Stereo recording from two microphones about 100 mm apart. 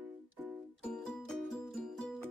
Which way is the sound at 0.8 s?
10° left (ahead or behind).